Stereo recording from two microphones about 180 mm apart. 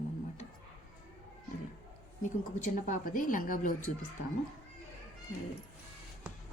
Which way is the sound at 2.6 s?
40° left (ahead or behind).